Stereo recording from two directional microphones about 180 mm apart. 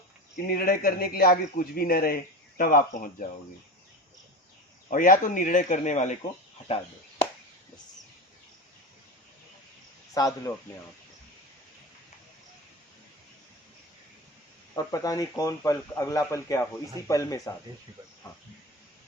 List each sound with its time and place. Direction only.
0.3 s a man's voice: 55° left (ahead or behind)
4.9 s speech: 50° left (ahead or behind)
10.2 s a man's voice: 20° left (ahead or behind)
14.8 s a man's voice: 20° left (ahead or behind)